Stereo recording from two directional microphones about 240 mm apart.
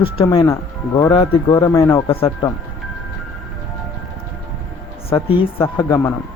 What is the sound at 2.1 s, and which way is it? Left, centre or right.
Speech, left.